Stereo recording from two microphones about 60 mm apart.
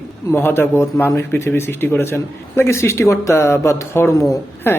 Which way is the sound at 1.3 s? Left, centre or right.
Left.